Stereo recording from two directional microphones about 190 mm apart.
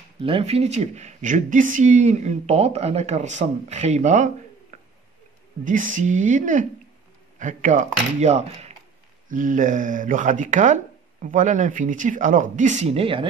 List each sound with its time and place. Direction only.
0.2 s speech: 30° right (ahead or behind)